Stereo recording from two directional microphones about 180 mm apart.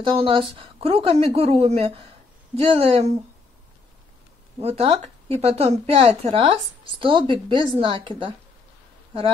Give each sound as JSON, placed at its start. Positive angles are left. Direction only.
{"t": 0.0, "sound": "a woman's voice", "side_deg": -30}
{"t": 4.6, "sound": "a woman's voice", "side_deg": -35}